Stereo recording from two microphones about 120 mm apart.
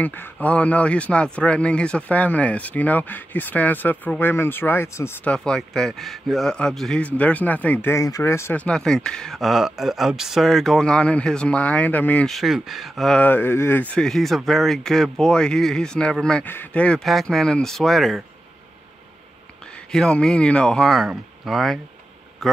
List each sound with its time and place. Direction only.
0.0 s a man's voice: 15° left (ahead or behind)
7.9 s speech: 25° left (ahead or behind)
8.6 s speech: 5° left (ahead or behind)
12.3 s speech: centre (ahead or behind)
13.2 s speech: 15° left (ahead or behind); by 18.2 s centre (ahead or behind)
19.9 s speech: 5° left (ahead or behind)